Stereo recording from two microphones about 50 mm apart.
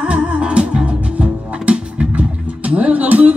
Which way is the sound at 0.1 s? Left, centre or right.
Centre.